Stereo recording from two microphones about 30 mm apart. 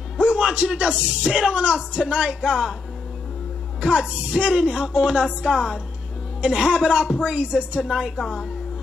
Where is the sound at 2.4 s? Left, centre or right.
Right.